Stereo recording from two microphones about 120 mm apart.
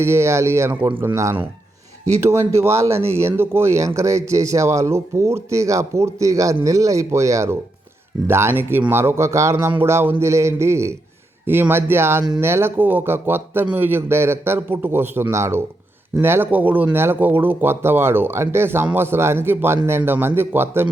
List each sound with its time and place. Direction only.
0.0 s a man's voice: 20° right (ahead or behind)